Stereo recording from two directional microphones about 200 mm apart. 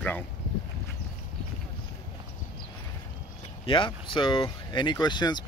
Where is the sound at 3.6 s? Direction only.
25° left (ahead or behind).